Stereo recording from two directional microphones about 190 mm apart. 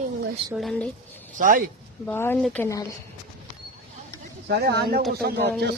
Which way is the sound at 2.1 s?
10° left (ahead or behind).